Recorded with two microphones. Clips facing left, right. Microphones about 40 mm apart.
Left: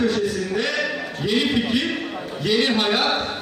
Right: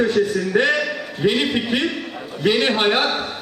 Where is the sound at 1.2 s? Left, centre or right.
Right.